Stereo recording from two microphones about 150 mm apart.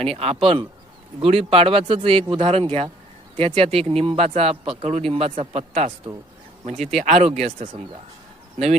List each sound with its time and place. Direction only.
0.0 s speech: 40° right (ahead or behind)